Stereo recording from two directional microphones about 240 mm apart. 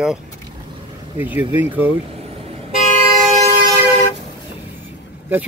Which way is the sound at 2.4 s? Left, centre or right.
Right.